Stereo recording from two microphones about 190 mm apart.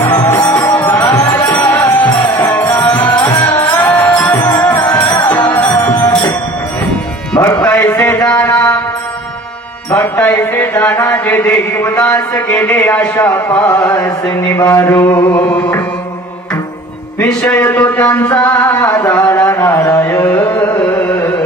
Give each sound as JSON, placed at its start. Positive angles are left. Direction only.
{"t": 0.0, "sound": "music", "side_deg": 10}
{"t": 2.0, "sound": "music", "side_deg": 20}
{"t": 7.3, "sound": "music", "side_deg": 20}
{"t": 7.6, "sound": "a sound", "side_deg": 10}
{"t": 9.8, "sound": "speech", "side_deg": 10}
{"t": 13.5, "sound": "music", "side_deg": 20}
{"t": 14.5, "sound": "speech", "side_deg": 15}
{"t": 17.2, "sound": "speech", "side_deg": 5}
{"t": 20.2, "sound": "music", "side_deg": 5}